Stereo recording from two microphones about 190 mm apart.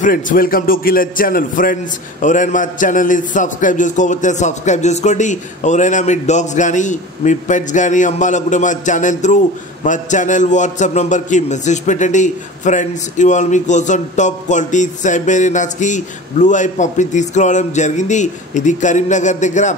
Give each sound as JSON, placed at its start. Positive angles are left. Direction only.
{"t": 0.0, "sound": "a man's voice", "side_deg": 45}